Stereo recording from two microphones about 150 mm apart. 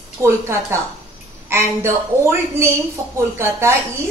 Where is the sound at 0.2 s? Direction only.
20° right (ahead or behind).